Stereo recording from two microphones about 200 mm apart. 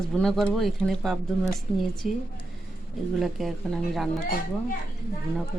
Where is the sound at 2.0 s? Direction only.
35° left (ahead or behind).